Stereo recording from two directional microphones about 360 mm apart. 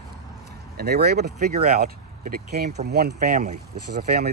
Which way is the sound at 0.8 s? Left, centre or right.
Right.